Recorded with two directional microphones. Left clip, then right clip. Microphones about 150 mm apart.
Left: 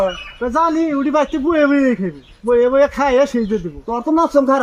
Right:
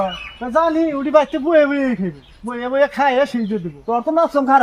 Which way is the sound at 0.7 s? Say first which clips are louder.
Right 1 dB; 20° right (ahead or behind).